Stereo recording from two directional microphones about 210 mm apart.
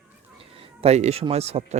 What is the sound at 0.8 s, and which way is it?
Speech, 30° right (ahead or behind).